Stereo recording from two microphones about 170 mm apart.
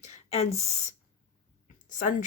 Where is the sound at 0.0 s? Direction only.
40° left (ahead or behind).